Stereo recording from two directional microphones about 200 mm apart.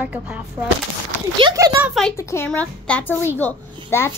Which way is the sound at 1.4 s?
25° right (ahead or behind).